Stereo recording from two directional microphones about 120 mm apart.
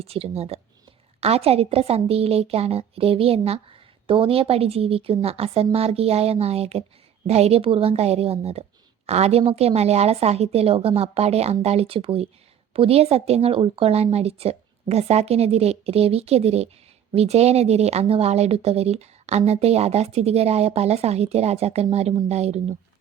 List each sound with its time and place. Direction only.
0.0 s speech: 55° right (ahead or behind)